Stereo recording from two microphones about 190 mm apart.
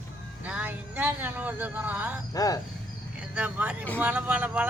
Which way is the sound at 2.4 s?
20° left (ahead or behind).